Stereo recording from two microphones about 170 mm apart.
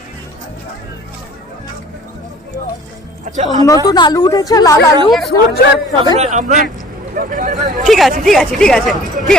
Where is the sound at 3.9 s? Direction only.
25° left (ahead or behind).